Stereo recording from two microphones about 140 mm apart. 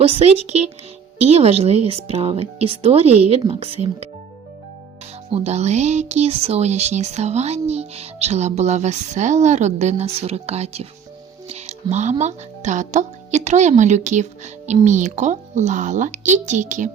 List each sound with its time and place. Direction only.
0.0 s speech: 45° right (ahead or behind)
5.3 s speech: 50° right (ahead or behind)